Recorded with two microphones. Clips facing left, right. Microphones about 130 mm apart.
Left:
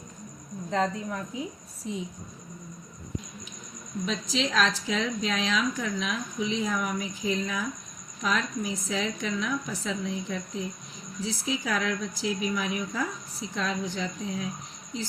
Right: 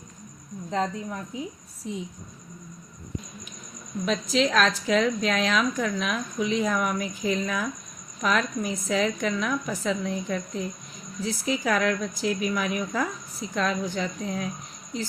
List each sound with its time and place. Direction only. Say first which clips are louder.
0.7 s a woman's voice: even; 10° right (ahead or behind)
4.0 s a woman's voice: right 6 dB; 55° right (ahead or behind)